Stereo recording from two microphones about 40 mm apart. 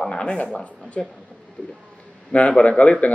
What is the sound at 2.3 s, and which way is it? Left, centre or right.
Speech, left.